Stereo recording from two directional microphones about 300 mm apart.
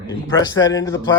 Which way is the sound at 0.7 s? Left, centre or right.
Centre.